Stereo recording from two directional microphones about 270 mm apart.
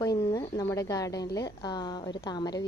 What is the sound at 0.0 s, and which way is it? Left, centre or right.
Speech, centre.